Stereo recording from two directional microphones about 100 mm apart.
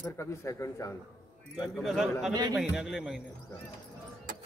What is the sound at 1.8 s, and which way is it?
A man's voice, centre (ahead or behind).